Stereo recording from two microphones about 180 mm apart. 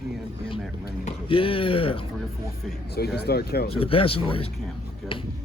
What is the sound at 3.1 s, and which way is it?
Speech, 60° left (ahead or behind).